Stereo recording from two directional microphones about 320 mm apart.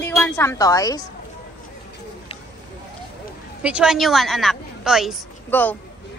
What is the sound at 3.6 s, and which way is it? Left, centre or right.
A woman's voice, centre.